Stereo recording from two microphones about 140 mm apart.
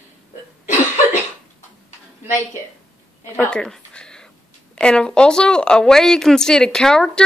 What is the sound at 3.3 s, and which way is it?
Speech, 5° left (ahead or behind).